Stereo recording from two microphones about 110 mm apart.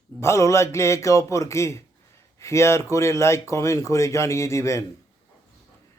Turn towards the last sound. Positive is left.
turn(degrees=25)  # may be behind; listen again after turning